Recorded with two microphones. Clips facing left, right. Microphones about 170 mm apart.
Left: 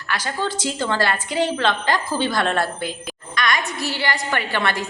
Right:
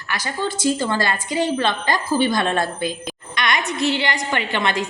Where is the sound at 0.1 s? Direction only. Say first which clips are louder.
Even; 10° right (ahead or behind).